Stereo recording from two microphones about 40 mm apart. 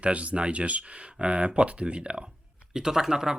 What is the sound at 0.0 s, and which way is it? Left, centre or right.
Speech, right.